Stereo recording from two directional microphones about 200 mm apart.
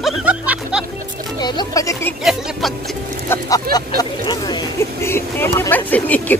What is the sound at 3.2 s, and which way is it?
Vehicle, 15° left (ahead or behind).